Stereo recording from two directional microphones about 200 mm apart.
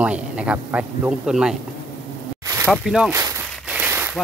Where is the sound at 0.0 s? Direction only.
5° right (ahead or behind).